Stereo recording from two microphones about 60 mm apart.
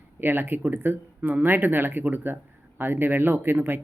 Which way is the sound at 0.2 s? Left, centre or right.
Right.